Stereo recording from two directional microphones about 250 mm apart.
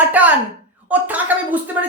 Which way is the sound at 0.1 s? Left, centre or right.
Centre.